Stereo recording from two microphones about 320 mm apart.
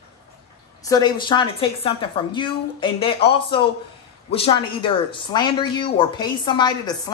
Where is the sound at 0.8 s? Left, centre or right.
Centre.